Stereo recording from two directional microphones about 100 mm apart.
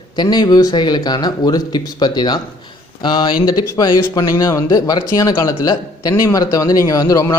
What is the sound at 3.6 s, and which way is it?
A man's voice, 35° left (ahead or behind).